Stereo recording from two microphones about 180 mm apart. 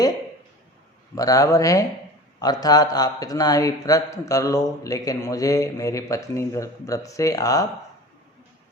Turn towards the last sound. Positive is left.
turn(degrees=20)  # may be behind; listen again after turning